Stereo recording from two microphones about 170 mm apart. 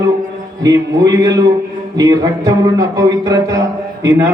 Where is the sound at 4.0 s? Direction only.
15° right (ahead or behind).